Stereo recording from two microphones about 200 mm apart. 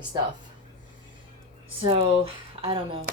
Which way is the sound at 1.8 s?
25° right (ahead or behind).